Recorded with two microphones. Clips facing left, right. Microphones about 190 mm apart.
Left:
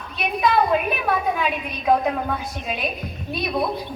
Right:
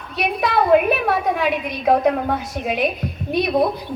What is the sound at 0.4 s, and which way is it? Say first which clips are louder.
A woman's voice: right 4 dB; 65° right (ahead or behind).